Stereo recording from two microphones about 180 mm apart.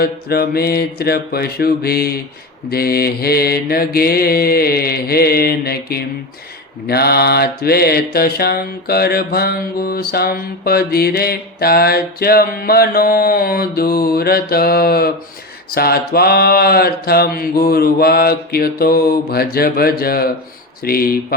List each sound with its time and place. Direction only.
0.0 s mantra: 60° left (ahead or behind)